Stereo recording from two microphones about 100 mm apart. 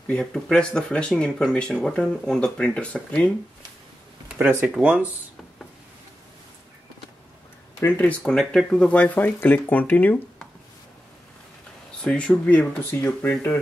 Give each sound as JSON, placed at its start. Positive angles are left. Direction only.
{"t": 0.1, "sound": "speech", "side_deg": 5}
{"t": 4.4, "sound": "speech", "side_deg": -20}
{"t": 4.6, "sound": "speech", "side_deg": -10}
{"t": 7.8, "sound": "speech", "side_deg": 15}
{"t": 12.0, "sound": "speech", "side_deg": 10}